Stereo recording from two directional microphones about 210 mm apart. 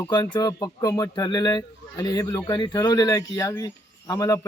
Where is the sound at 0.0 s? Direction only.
20° left (ahead or behind).